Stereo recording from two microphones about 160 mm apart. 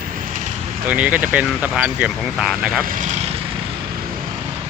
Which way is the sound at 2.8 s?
55° right (ahead or behind).